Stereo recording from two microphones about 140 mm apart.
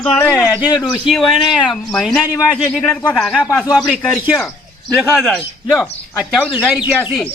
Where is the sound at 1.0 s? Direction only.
Centre (ahead or behind).